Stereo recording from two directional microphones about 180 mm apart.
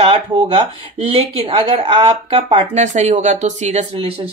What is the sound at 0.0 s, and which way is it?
Speech, 30° right (ahead or behind).